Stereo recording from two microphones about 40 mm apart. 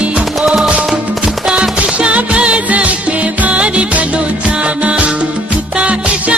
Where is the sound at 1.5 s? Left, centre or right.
Right.